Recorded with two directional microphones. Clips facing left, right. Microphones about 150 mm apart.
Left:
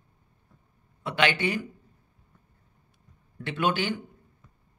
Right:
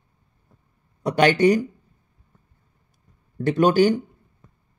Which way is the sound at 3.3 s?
40° right (ahead or behind).